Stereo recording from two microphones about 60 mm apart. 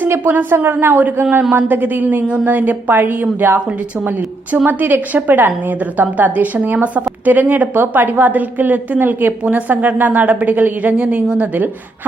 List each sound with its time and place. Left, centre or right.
0.1 s a woman's voice: right
10.9 s a woman's voice: centre